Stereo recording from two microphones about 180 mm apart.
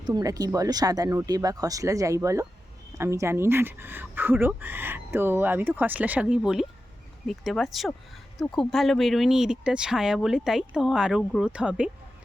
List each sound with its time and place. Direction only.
0.0 s speech: 20° right (ahead or behind)